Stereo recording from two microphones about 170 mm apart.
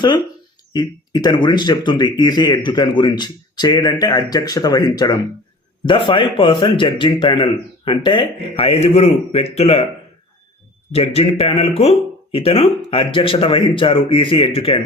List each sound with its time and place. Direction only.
0.7 s speech: 25° left (ahead or behind)
10.9 s speech: 35° left (ahead or behind)